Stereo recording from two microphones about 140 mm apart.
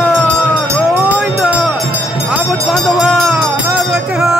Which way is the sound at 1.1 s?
5° right (ahead or behind).